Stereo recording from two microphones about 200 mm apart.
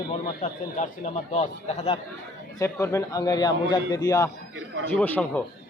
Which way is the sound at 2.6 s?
15° left (ahead or behind).